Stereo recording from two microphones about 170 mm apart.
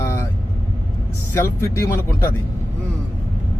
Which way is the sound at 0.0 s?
15° left (ahead or behind).